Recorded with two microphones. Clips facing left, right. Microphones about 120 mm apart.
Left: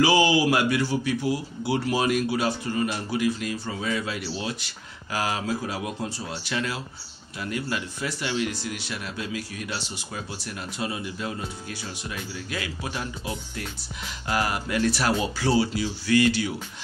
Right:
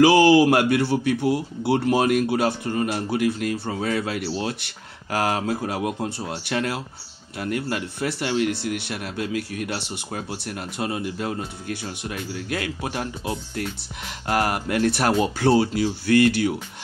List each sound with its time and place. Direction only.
0.0 s speech: 55° right (ahead or behind)